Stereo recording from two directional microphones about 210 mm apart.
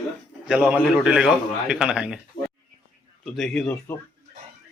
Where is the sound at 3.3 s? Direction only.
Centre (ahead or behind).